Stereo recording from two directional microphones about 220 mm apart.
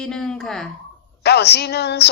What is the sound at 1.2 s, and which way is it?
Speech, 50° left (ahead or behind).